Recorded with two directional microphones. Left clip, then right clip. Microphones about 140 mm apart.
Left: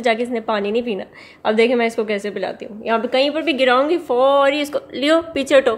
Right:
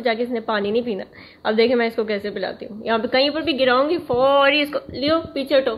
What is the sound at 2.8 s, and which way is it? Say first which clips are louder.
A woman's voice: left 1 dB; 5° left (ahead or behind).